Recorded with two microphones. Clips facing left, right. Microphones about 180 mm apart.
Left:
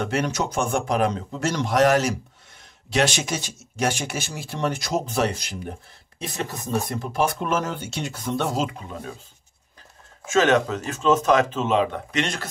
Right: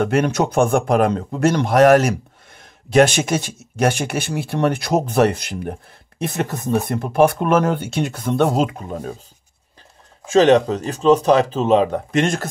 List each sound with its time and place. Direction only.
0.0 s a man's voice: 55° right (ahead or behind)
10.2 s speech: 35° right (ahead or behind)